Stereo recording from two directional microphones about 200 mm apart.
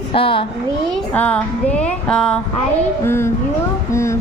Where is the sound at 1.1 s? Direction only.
5° left (ahead or behind).